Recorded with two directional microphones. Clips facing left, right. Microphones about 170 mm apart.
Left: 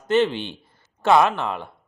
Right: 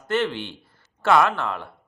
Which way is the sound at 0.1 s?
20° left (ahead or behind).